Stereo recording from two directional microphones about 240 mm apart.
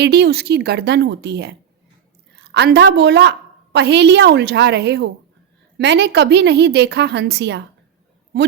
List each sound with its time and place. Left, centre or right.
0.0 s a woman's voice: right